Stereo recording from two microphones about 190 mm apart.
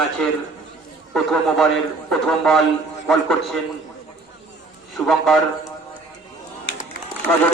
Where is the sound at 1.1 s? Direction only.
Centre (ahead or behind).